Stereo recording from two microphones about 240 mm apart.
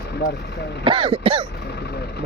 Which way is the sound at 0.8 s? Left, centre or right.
Right.